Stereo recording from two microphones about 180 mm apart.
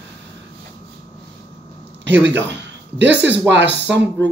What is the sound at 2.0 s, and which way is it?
Speech, 80° right.